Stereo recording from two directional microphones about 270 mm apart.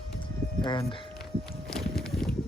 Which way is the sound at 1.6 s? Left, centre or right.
Centre.